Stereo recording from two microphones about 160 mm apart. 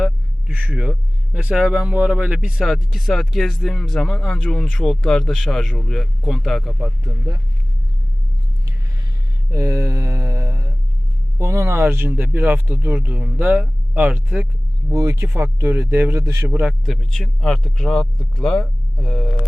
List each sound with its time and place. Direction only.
0.0 s speech: 5° right (ahead or behind)
9.5 s mantra: 20° right (ahead or behind)
11.3 s speech: 20° right (ahead or behind)
14.9 s speech: 20° right (ahead or behind)
16.6 s speech: centre (ahead or behind)